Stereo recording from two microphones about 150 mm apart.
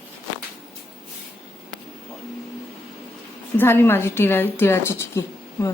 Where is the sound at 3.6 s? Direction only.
15° left (ahead or behind).